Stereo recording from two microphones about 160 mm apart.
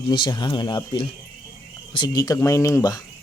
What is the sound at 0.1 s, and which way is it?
Speech, 30° left (ahead or behind).